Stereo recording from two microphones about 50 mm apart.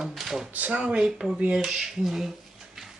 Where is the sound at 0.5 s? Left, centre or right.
Right.